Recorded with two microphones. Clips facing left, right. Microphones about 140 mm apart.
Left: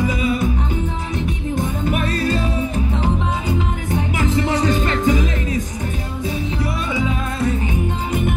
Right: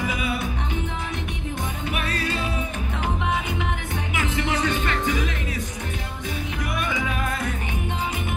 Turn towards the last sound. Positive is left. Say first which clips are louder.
# left 6 dB
turn(degrees=25)  # may be behind; listen again after turning